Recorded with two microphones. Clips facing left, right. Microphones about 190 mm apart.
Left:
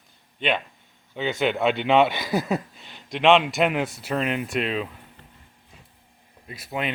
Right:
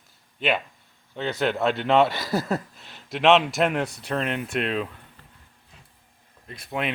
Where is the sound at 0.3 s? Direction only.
5° right (ahead or behind).